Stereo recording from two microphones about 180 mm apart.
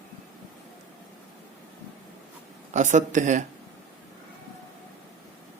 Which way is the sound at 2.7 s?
40° right (ahead or behind).